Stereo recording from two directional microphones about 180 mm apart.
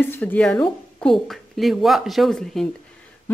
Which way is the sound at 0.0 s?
10° left (ahead or behind).